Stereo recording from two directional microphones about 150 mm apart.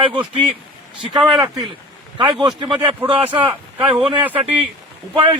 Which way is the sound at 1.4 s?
25° right (ahead or behind).